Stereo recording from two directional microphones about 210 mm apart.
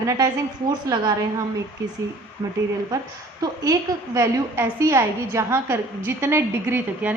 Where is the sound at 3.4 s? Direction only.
20° right (ahead or behind).